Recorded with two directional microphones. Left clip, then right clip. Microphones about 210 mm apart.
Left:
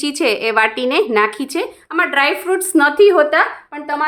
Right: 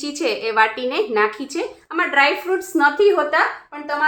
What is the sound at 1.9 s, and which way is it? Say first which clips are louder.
A woman's voice: left 2 dB; 30° left (ahead or behind).